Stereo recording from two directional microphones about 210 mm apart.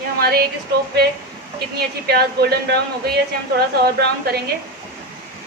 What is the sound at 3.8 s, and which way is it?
Speech, 50° right (ahead or behind).